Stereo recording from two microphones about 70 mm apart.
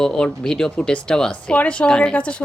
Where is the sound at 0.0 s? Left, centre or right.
Centre.